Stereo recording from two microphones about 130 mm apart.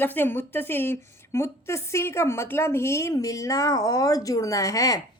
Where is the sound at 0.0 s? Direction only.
15° left (ahead or behind).